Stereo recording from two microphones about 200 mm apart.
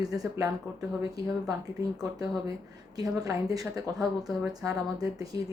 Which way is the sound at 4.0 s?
Centre (ahead or behind).